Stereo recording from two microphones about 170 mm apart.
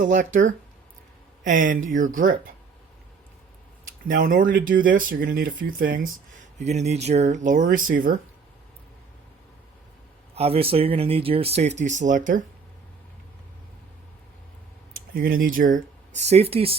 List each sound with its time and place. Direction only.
0.0 s speech: 45° right (ahead or behind)
1.5 s speech: 50° right (ahead or behind)
4.1 s speech: 50° right (ahead or behind)
6.6 s speech: 40° right (ahead or behind)
10.3 s speech: 35° right (ahead or behind)
14.9 s speech: 60° right (ahead or behind)
16.2 s speech: 40° right (ahead or behind)